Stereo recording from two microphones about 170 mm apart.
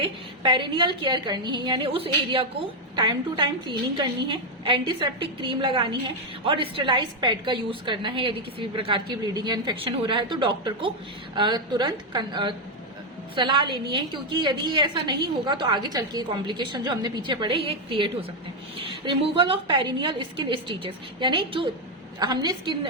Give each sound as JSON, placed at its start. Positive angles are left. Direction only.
{"t": 0.0, "sound": "a woman's voice", "side_deg": -30}